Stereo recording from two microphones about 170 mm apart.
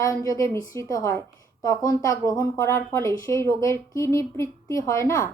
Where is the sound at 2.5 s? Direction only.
15° left (ahead or behind).